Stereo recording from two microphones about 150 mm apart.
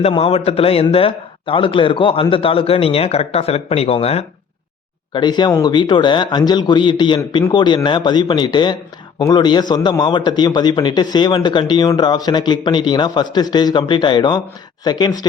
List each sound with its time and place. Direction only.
0.0 s a man's voice: 40° left (ahead or behind)
5.1 s a man's voice: 30° left (ahead or behind)